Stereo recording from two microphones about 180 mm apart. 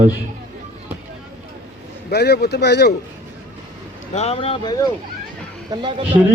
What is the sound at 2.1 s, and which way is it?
Speech, 65° left (ahead or behind).